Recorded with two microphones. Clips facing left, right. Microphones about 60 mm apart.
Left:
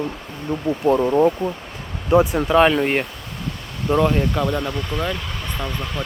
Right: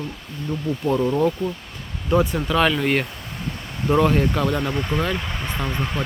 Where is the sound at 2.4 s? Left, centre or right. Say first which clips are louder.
Left 4 dB; left.